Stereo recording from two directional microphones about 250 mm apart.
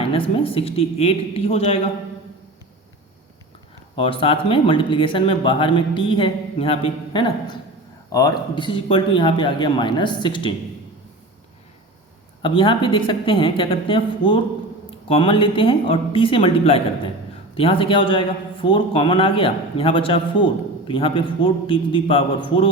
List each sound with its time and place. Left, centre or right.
0.0 s speech: left
3.9 s speech: left
12.4 s speech: centre